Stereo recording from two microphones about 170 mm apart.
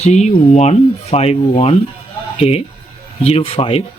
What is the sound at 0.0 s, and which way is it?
Speech, 40° left (ahead or behind).